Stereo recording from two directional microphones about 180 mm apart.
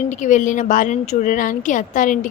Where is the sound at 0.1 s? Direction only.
45° left (ahead or behind).